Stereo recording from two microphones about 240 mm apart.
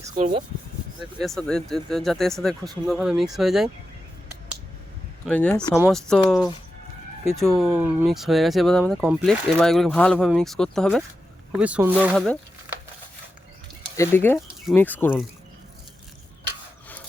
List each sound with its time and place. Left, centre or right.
0.1 s speech: right
1.2 s speech: centre
5.2 s speech: centre
13.9 s speech: centre